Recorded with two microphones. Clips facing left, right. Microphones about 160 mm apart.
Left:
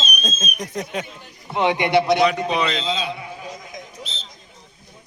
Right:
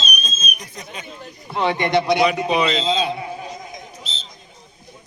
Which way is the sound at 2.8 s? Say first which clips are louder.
Right 5 dB; 30° right (ahead or behind).